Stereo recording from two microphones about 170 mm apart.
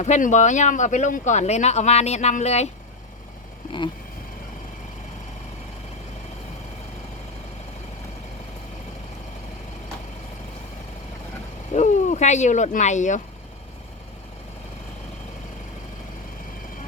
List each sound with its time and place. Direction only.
0.0 s speech: 45° left (ahead or behind)
11.7 s speech: 45° left (ahead or behind)